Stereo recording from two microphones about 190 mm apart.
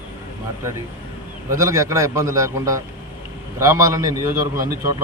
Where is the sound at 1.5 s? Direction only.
15° right (ahead or behind).